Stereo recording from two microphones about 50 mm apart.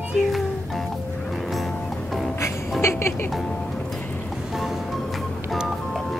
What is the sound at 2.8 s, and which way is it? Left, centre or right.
Music, left.